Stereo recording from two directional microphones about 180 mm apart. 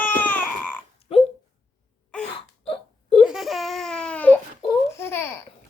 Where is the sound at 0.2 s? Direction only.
10° left (ahead or behind).